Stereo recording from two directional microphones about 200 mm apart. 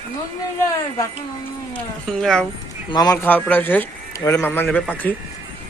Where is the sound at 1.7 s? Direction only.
Centre (ahead or behind).